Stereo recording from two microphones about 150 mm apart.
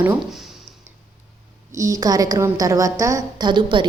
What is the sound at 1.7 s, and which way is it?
A woman's voice, 20° right (ahead or behind).